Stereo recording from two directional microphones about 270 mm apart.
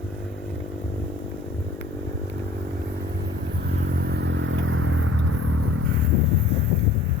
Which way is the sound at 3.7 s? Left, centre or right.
Right.